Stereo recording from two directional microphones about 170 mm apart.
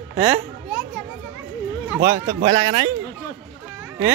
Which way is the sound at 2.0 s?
20° right (ahead or behind).